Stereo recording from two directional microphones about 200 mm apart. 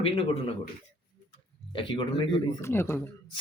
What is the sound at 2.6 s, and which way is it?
Speech, 10° left (ahead or behind).